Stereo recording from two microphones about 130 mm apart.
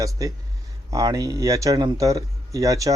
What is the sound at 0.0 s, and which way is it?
A man's voice, 25° right (ahead or behind).